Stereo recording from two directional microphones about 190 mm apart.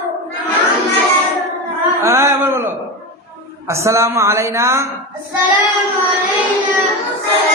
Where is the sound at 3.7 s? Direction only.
15° right (ahead or behind).